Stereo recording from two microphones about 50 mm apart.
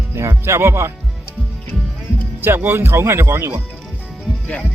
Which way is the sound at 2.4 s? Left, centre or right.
Right.